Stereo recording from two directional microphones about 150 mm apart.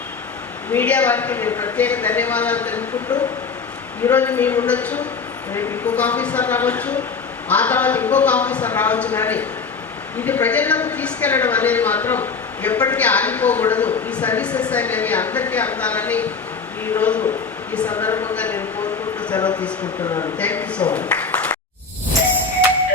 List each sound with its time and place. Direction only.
0.7 s speech: 10° left (ahead or behind)
4.0 s speech: 10° left (ahead or behind)
19.3 s speech: 30° left (ahead or behind)
20.4 s a man's voice: 10° left (ahead or behind)